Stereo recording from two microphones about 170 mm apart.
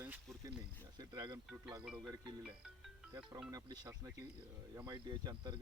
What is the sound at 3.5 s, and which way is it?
Speech, 20° right (ahead or behind).